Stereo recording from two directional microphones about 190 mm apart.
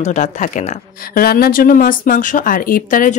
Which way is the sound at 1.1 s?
55° left (ahead or behind).